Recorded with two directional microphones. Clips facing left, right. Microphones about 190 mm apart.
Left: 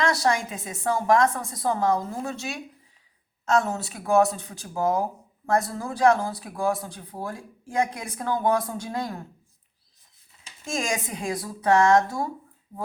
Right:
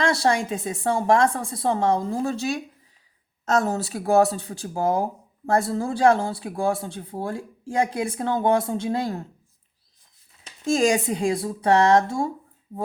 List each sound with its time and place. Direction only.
0.0 s speech: 30° right (ahead or behind)
10.7 s speech: 35° right (ahead or behind)